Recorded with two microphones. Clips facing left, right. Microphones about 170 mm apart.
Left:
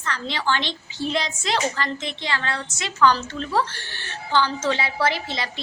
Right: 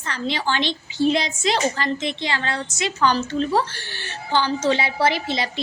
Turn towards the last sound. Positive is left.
turn(degrees=-15)  # may be behind; listen again after turning